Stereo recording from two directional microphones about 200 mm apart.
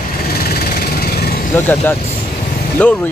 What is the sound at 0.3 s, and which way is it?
Vehicle, 50° left (ahead or behind).